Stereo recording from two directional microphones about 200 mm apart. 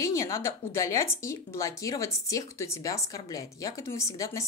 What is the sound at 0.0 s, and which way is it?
A woman's voice, 15° left (ahead or behind).